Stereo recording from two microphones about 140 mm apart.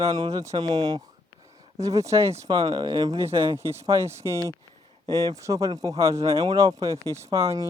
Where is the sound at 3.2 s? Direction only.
20° right (ahead or behind).